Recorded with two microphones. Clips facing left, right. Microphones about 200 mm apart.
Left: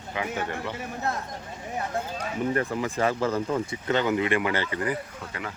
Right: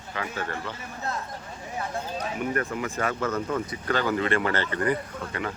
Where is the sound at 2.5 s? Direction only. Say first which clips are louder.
Left 2 dB; 30° left (ahead or behind); by 4.7 s 15° left (ahead or behind).